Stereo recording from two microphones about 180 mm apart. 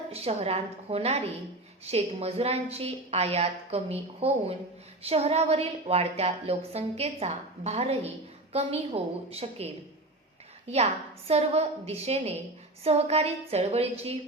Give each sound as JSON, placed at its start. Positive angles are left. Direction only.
{"t": 0.1, "sound": "a woman's voice", "side_deg": -35}
{"t": 10.7, "sound": "a woman's voice", "side_deg": -35}